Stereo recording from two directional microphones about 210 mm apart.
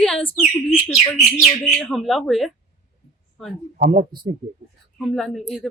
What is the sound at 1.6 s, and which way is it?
Speech, centre (ahead or behind).